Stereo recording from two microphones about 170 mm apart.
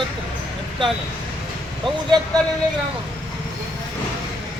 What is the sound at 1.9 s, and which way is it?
Speech, 25° right (ahead or behind).